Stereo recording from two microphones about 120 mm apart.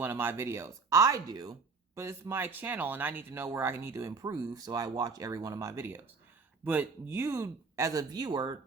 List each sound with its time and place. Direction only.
0.0 s speech: 20° right (ahead or behind); by 8.5 s 35° right (ahead or behind)